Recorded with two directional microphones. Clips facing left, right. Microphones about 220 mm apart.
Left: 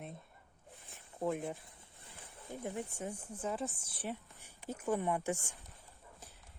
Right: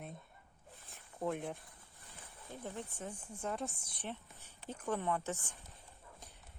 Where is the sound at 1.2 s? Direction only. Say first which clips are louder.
Left 2 dB; centre (ahead or behind).